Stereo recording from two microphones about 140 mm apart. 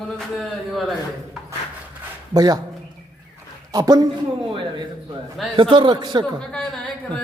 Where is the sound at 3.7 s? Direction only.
25° right (ahead or behind).